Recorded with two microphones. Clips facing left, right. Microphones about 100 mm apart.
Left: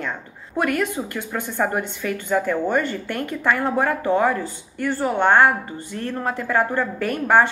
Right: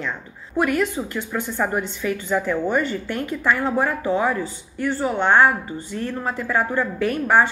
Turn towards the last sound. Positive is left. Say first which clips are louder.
# even
turn(degrees=50)  # may be behind; listen again after turning